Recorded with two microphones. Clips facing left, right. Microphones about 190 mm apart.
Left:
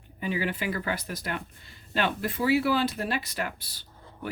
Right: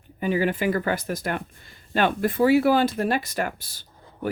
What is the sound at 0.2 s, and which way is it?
Speech, 45° right (ahead or behind).